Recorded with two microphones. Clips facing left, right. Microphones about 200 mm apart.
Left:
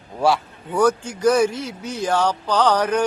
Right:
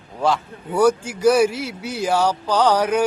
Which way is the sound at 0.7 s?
10° right (ahead or behind).